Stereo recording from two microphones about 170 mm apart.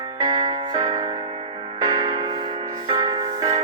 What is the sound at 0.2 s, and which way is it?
Music, 20° right (ahead or behind).